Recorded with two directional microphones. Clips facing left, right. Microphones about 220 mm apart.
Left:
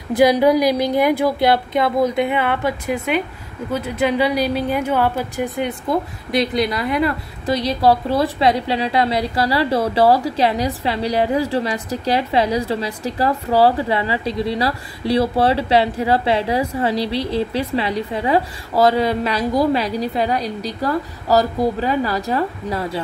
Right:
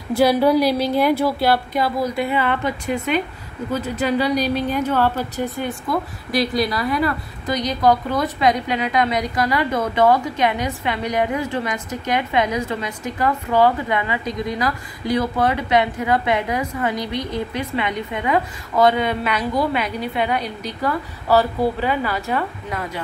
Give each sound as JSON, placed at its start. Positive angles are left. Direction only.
{"t": 0.1, "sound": "a woman's voice", "side_deg": 15}